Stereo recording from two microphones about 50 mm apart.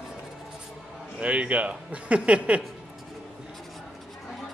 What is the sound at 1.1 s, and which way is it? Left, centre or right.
A man's voice, right.